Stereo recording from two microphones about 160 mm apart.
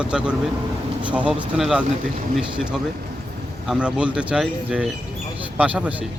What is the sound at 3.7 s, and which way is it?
Speech, 5° right (ahead or behind).